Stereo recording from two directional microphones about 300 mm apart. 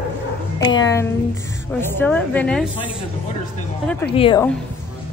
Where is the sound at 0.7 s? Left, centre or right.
Centre.